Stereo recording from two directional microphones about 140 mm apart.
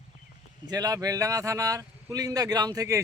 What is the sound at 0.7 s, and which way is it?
Speech, 25° right (ahead or behind).